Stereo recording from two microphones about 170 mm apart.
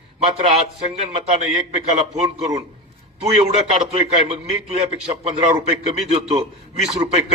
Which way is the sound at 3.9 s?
35° right (ahead or behind).